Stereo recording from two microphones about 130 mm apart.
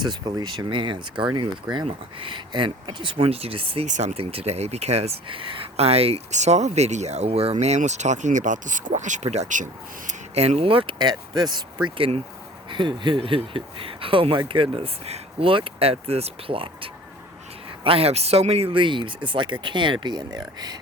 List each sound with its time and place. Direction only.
0.0 s speech: 35° right (ahead or behind)
3.8 s speech: 65° right (ahead or behind)
10.1 s speech: 55° right (ahead or behind); by 20.7 s 30° right (ahead or behind)